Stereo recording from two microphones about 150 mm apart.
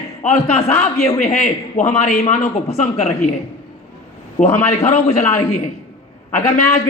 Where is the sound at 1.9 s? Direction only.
45° left (ahead or behind).